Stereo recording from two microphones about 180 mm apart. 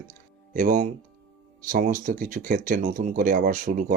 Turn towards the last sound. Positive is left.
turn(degrees=-50)  # may be behind; listen again after turning